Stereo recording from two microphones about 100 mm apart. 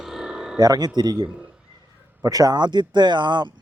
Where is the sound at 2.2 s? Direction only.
40° right (ahead or behind).